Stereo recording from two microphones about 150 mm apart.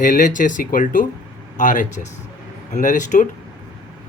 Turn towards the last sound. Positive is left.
turn(degrees=55)  # may be behind; listen again after turning